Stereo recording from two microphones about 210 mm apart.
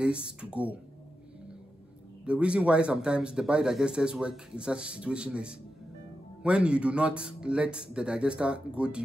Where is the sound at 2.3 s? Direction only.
5° right (ahead or behind).